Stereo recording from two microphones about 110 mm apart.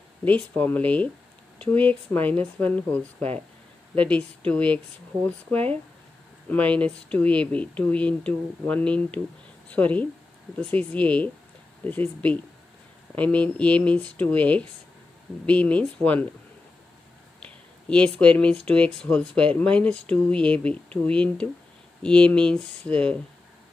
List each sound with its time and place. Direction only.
0.2 s speech: 15° left (ahead or behind)
17.5 s speech: 10° left (ahead or behind)